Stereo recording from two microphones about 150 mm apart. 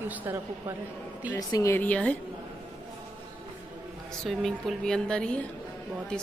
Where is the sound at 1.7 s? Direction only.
10° left (ahead or behind).